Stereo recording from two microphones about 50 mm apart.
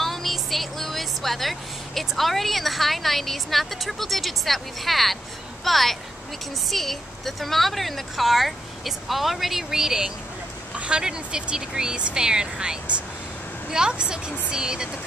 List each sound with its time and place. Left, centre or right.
0.0 s a woman's voice: centre